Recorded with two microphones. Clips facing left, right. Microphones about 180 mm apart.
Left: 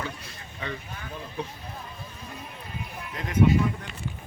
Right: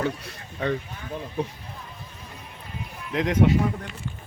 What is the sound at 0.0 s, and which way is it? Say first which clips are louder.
Speech: right 8 dB; 65° right (ahead or behind).